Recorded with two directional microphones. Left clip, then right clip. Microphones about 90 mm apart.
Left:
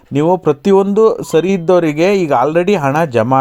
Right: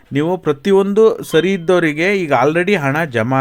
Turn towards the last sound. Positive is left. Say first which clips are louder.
# left 4 dB
turn(degrees=30)  # may be behind; listen again after turning